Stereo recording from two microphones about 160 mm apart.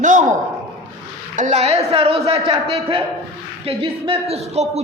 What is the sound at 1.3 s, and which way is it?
A man's voice, 45° right (ahead or behind).